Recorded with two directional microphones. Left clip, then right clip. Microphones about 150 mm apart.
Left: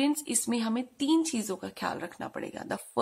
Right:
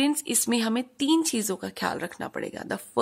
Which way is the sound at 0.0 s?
25° right (ahead or behind).